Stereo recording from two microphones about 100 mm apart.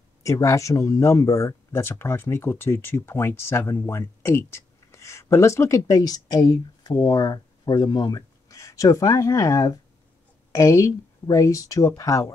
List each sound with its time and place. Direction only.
0.2 s speech: 30° left (ahead or behind)